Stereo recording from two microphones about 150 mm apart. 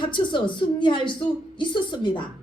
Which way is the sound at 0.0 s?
30° left (ahead or behind).